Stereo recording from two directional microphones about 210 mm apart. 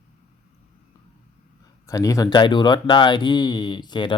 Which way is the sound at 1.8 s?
15° left (ahead or behind).